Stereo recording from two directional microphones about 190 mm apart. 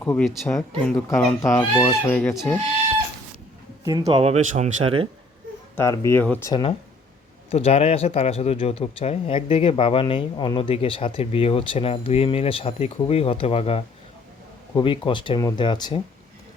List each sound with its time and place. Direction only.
0.0 s speech: 5° left (ahead or behind)
0.9 s speech: 15° left (ahead or behind)
2.3 s speech: centre (ahead or behind)
3.8 s speech: 20° right (ahead or behind)
4.2 s speech: 35° right (ahead or behind)
5.7 s speech: 15° left (ahead or behind)
6.5 s speech: 25° left (ahead or behind)